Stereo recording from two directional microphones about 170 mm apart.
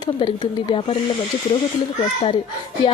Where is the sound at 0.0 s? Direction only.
30° left (ahead or behind).